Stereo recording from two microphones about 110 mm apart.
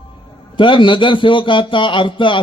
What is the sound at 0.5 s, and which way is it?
A man's voice, 50° left (ahead or behind).